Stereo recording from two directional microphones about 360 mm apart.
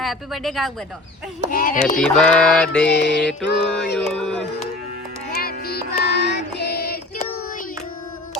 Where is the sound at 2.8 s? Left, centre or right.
Left.